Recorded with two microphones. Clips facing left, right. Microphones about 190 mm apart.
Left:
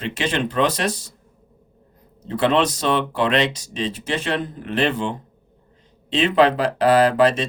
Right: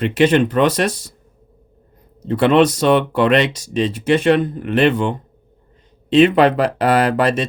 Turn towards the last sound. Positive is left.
turn(degrees=-60)  # may be behind; listen again after turning